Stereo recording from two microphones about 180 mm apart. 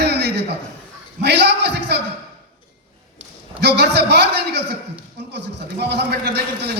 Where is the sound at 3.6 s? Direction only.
70° right (ahead or behind).